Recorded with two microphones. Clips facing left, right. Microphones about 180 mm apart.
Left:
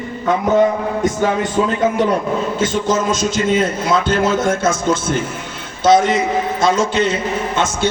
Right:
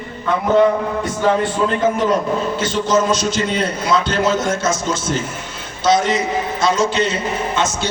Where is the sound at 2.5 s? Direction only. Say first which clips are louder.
Right 1 dB; 50° left (ahead or behind).